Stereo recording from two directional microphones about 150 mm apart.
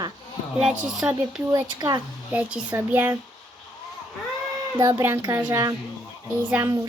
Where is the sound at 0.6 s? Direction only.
5° right (ahead or behind).